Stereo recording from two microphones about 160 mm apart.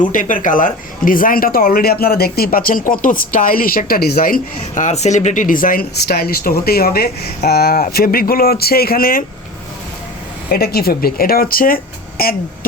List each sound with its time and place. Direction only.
0.1 s a woman's voice: 55° left (ahead or behind)
10.5 s a woman's voice: 75° left (ahead or behind)